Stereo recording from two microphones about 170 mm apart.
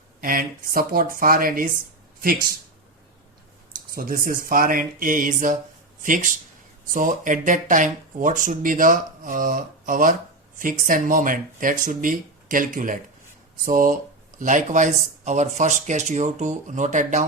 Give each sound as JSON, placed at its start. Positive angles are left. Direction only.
{"t": 0.2, "sound": "speech", "side_deg": -55}
{"t": 3.9, "sound": "speech", "side_deg": -55}